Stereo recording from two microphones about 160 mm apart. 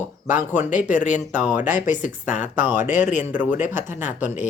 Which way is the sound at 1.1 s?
50° left (ahead or behind).